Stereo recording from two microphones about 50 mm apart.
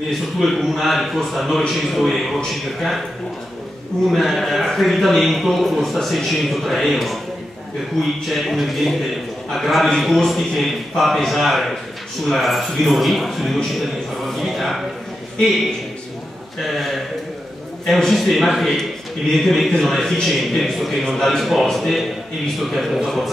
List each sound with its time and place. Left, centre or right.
0.4 s a man's voice: centre
4.1 s a man's voice: centre
8.3 s a man's voice: centre
14.2 s a sound: centre
16.7 s a man's voice: centre